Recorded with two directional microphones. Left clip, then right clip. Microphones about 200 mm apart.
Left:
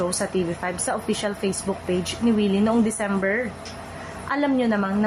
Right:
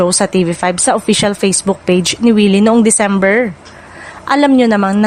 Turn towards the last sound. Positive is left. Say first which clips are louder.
# right 11 dB
turn(degrees=-50)  # may be behind; listen again after turning